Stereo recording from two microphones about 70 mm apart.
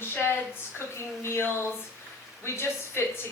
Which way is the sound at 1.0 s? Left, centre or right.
Left.